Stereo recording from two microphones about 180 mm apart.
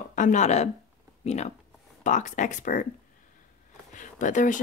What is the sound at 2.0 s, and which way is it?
Speech, 45° left (ahead or behind).